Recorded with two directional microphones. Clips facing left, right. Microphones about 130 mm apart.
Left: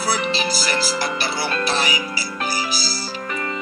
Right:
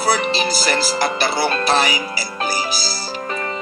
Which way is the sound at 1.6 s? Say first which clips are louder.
Right 4 dB; 60° right (ahead or behind).